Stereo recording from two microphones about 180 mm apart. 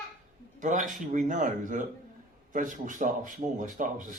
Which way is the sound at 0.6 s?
45° right (ahead or behind).